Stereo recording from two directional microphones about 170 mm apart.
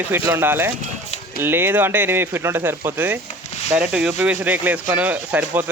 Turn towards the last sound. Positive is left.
turn(degrees=-10)  # may be behind; listen again after turning